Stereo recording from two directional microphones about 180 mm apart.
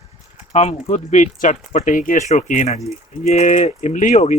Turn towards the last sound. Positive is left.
turn(degrees=40)  # may be behind; listen again after turning